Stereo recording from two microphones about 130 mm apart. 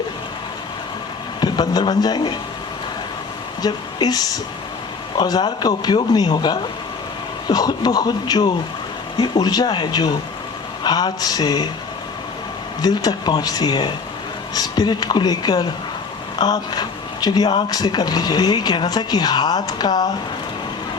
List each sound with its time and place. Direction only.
1.4 s a man's voice: 35° left (ahead or behind)
3.6 s speech: 30° left (ahead or behind)
12.8 s speech: 30° left (ahead or behind)